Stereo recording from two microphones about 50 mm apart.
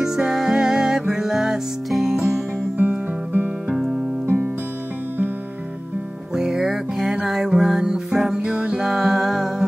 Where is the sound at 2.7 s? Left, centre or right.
Right.